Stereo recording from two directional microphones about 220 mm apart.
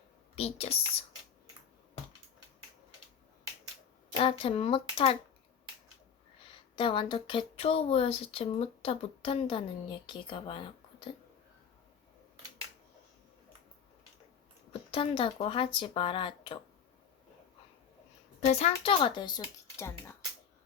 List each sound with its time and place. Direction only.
0.3 s speech: 25° left (ahead or behind)
4.1 s speech: 25° left (ahead or behind)
6.7 s speech: 25° left (ahead or behind)
14.7 s speech: 25° left (ahead or behind)
18.3 s speech: 30° left (ahead or behind); by 20.1 s 10° left (ahead or behind)